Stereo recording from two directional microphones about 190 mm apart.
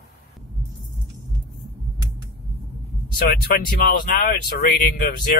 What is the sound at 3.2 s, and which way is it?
Speech, 55° left (ahead or behind).